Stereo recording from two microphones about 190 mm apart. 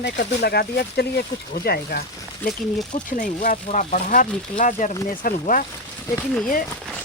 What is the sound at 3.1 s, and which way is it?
Speech, 45° left (ahead or behind).